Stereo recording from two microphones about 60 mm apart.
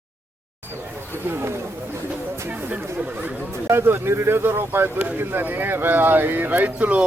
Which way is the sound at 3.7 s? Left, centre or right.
Right.